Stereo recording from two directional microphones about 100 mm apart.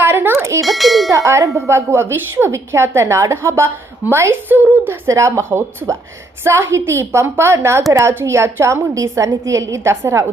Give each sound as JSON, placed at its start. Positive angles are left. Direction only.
{"t": 0.0, "sound": "a sound", "side_deg": -20}
{"t": 0.6, "sound": "speech", "side_deg": 0}
{"t": 1.1, "sound": "tubular bells", "side_deg": -30}
{"t": 1.5, "sound": "a woman's voice", "side_deg": -25}